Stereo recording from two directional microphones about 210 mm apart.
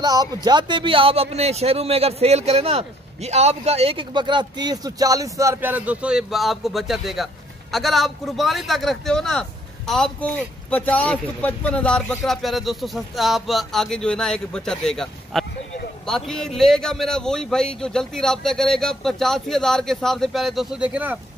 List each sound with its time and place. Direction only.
0.0 s speech: 20° right (ahead or behind)